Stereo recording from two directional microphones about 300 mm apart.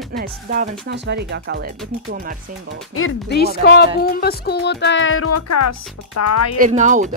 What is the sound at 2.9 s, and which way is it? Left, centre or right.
Music, left.